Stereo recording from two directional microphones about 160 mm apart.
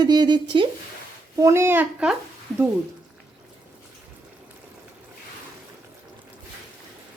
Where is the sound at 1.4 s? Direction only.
15° right (ahead or behind).